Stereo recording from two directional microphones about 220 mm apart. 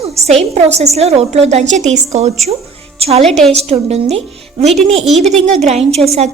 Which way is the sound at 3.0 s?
30° right (ahead or behind).